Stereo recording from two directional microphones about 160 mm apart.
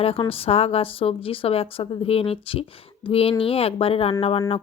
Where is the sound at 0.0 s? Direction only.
35° left (ahead or behind).